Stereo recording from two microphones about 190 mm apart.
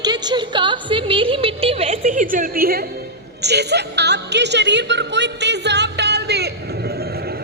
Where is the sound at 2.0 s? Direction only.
45° right (ahead or behind).